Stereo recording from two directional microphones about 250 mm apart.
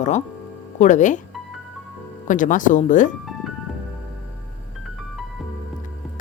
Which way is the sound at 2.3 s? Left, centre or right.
Left.